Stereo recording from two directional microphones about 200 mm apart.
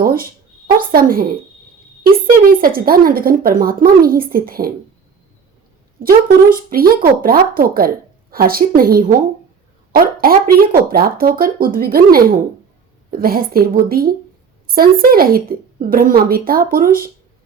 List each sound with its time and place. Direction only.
0.0 s a sound: 45° right (ahead or behind)
0.8 s speech: 45° right (ahead or behind)
6.2 s speech: 45° right (ahead or behind)